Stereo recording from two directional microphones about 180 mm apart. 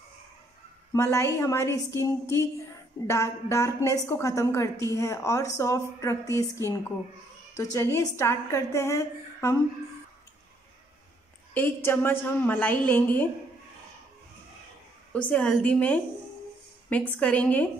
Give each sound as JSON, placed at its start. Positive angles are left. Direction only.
{"t": 0.9, "sound": "a woman's voice", "side_deg": 15}
{"t": 11.5, "sound": "a woman's voice", "side_deg": 10}
{"t": 15.1, "sound": "a woman's voice", "side_deg": 5}
{"t": 17.2, "sound": "a woman's voice", "side_deg": 10}